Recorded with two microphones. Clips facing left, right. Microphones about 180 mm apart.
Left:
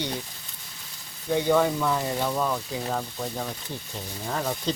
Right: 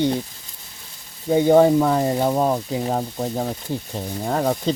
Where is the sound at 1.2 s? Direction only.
40° right (ahead or behind).